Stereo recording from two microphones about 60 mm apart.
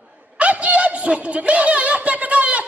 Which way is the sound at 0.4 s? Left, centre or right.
Right.